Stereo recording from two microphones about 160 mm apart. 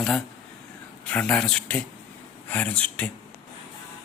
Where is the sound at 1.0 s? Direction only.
5° left (ahead or behind).